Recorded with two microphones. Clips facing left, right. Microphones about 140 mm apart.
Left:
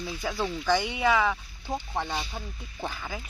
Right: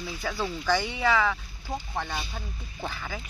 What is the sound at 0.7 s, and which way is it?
Speech, 15° left (ahead or behind).